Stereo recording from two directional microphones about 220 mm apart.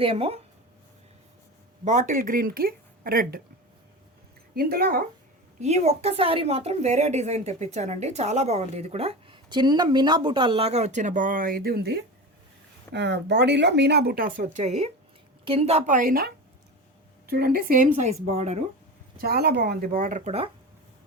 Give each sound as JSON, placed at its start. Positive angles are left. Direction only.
{"t": 0.0, "sound": "speech", "side_deg": -25}
{"t": 1.8, "sound": "speech", "side_deg": -35}
{"t": 4.5, "sound": "speech", "side_deg": -45}
{"t": 5.5, "sound": "speech", "side_deg": -30}
{"t": 19.1, "sound": "speech", "side_deg": -45}